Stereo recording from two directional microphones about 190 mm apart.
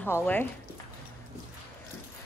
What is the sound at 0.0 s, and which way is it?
Speech, 10° left (ahead or behind).